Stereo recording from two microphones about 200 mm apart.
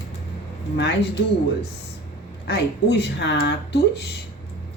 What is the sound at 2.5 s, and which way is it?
Speech, 60° left (ahead or behind).